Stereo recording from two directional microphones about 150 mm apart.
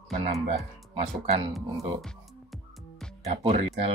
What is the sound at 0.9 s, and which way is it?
Speech, 40° right (ahead or behind).